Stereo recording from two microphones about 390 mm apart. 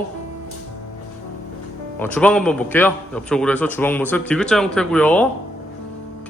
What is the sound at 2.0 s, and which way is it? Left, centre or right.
A man's voice, centre.